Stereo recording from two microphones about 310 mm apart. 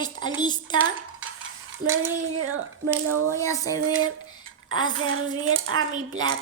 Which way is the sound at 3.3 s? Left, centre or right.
Centre.